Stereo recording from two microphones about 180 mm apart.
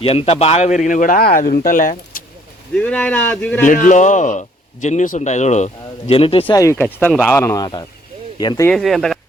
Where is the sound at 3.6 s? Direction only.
45° left (ahead or behind); by 6.4 s 30° left (ahead or behind).